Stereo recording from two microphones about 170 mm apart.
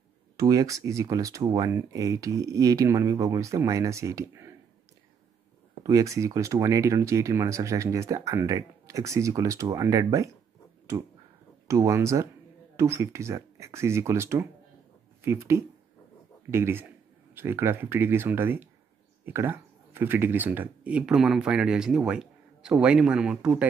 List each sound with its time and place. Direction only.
0.4 s speech: 20° right (ahead or behind)
5.9 s speech: 20° right (ahead or behind)